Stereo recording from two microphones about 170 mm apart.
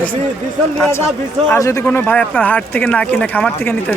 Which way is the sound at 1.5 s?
20° left (ahead or behind).